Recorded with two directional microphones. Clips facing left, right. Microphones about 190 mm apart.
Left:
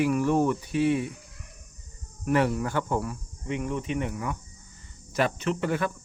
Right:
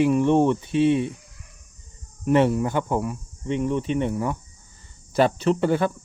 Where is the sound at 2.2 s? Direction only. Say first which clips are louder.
Right 5 dB; 25° right (ahead or behind).